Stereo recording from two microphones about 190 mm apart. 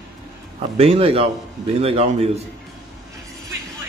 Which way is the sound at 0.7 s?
30° right (ahead or behind).